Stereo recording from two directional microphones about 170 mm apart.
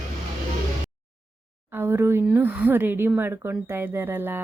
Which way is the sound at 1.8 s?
15° right (ahead or behind).